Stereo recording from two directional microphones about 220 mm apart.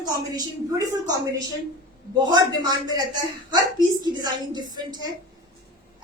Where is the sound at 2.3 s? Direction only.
20° right (ahead or behind).